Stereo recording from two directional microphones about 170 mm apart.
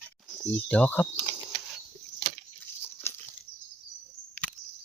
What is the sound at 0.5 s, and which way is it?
Speech, 10° left (ahead or behind).